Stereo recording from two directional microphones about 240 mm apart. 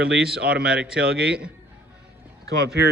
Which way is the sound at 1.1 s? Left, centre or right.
Right.